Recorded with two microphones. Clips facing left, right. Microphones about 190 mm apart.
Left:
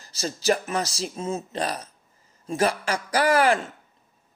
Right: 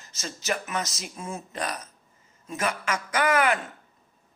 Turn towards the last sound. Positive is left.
turn(degrees=30)  # may be behind; listen again after turning